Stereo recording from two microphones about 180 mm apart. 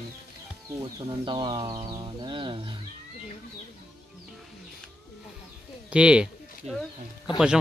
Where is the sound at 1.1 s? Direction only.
25° right (ahead or behind).